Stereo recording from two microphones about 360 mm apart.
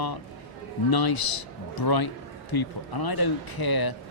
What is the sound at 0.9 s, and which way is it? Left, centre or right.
Speech, left.